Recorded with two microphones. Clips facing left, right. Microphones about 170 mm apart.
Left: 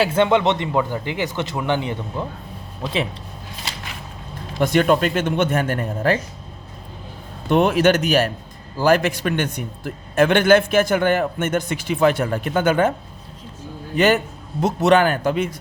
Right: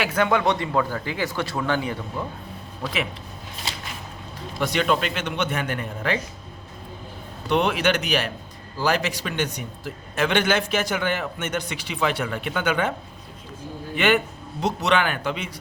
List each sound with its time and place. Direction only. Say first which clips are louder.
0.0 s speech: left 5 dB; 25° left (ahead or behind)
4.6 s speech: left 6 dB; 50° left (ahead or behind)
7.4 s speech: left 6 dB; 45° left (ahead or behind)
13.9 s speech: left 4 dB; 40° left (ahead or behind)